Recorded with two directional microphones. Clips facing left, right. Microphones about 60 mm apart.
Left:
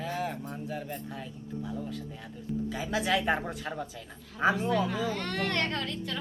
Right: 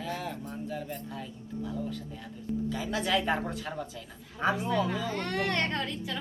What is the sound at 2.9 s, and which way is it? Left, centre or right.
Speech, centre.